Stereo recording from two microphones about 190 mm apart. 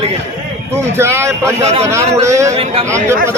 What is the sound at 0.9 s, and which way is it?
A man's voice, 15° right (ahead or behind).